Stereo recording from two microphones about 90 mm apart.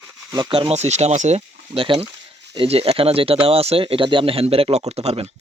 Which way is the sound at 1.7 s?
75° right (ahead or behind).